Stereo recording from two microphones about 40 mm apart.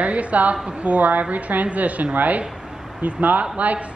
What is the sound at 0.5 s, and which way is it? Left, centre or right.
Speech, right.